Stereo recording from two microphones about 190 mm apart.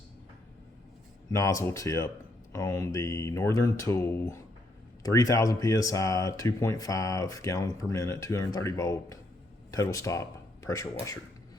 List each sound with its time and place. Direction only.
1.3 s speech: 15° left (ahead or behind)